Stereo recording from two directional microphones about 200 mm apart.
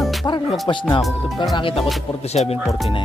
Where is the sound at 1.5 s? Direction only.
25° left (ahead or behind).